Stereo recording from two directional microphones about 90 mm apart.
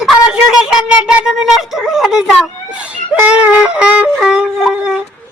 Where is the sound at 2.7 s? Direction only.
15° right (ahead or behind).